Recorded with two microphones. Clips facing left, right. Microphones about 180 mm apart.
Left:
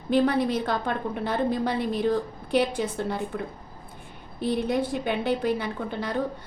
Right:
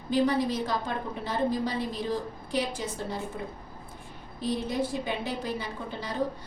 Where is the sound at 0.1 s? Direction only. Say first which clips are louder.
Left 3 dB; 60° left (ahead or behind).